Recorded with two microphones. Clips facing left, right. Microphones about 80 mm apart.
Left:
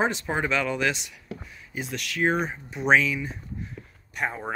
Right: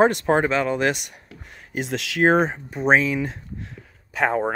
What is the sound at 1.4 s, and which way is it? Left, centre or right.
Speech, right.